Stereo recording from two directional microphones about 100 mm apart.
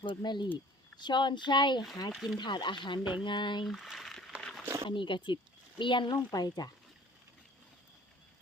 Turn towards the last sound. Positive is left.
turn(degrees=45)  # may be behind; listen again after turning